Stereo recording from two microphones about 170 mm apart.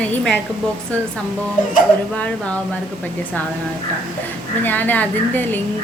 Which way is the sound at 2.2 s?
5° left (ahead or behind).